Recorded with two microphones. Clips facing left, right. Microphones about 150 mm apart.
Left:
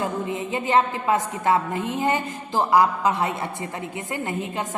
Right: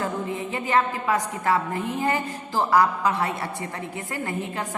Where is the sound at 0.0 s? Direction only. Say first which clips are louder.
Left 1 dB; 20° left (ahead or behind).